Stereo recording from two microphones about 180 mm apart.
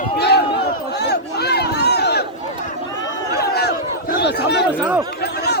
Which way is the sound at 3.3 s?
65° left (ahead or behind).